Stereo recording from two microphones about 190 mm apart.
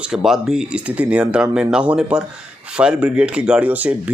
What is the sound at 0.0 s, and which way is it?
Speech, centre (ahead or behind).